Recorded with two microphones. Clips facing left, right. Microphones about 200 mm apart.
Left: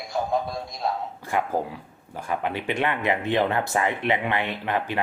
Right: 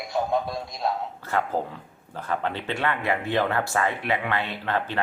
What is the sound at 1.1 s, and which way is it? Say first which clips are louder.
Speech: left 1 dB; 15° left (ahead or behind).